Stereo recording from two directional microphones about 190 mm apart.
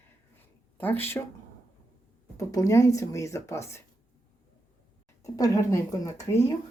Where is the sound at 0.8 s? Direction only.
10° left (ahead or behind).